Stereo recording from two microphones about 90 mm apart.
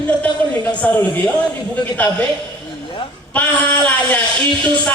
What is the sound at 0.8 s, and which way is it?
Speech, 20° left (ahead or behind).